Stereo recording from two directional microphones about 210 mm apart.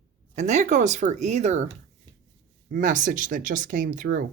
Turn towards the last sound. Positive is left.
turn(degrees=-40)  # may be behind; listen again after turning